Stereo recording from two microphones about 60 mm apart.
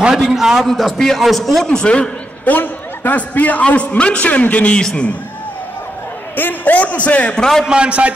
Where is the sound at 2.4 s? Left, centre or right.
Left.